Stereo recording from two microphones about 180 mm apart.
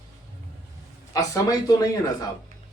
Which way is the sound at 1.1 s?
20° left (ahead or behind).